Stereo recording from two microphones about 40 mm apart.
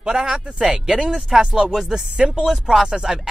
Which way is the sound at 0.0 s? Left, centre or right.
Centre.